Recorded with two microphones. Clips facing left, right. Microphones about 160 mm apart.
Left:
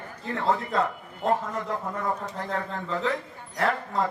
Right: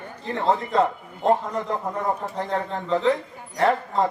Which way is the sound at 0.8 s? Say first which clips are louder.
Right 5 dB; 25° right (ahead or behind).